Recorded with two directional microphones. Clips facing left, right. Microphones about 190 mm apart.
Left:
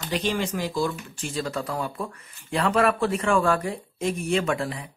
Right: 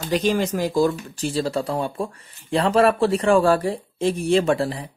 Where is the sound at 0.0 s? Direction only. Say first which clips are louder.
Right 6 dB; 40° right (ahead or behind).